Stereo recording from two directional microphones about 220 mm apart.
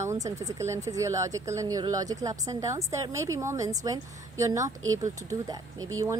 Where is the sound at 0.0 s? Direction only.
15° right (ahead or behind).